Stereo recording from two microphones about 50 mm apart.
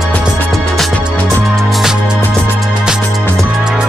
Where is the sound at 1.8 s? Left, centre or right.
Centre.